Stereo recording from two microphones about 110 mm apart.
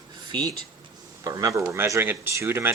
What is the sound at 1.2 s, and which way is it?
Speech, 30° right (ahead or behind).